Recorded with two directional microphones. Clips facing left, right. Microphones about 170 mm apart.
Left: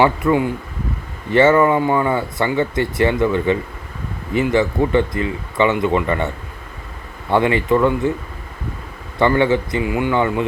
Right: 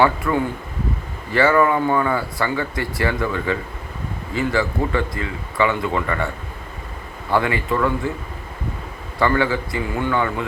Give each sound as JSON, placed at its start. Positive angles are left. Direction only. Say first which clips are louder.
{"t": 0.0, "sound": "speech", "louder": "left 3 dB", "side_deg": 20}
{"t": 9.1, "sound": "speech", "louder": "left 4 dB", "side_deg": 20}